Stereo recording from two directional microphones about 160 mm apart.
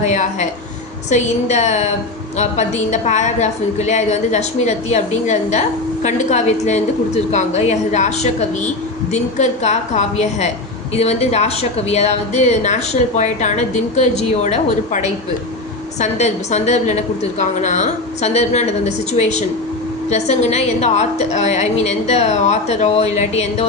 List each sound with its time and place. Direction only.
0.0 s a woman's voice: 50° left (ahead or behind)